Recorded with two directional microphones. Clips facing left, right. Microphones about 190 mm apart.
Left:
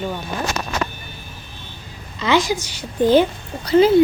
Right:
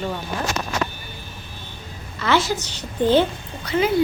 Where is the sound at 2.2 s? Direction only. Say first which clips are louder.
Left 2 dB; 15° left (ahead or behind).